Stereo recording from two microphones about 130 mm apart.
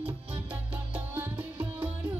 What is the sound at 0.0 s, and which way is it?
Music, 10° right (ahead or behind).